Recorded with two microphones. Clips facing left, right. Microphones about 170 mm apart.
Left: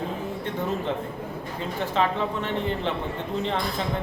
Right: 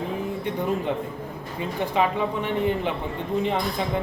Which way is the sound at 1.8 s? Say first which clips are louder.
Right 2 dB; 15° right (ahead or behind).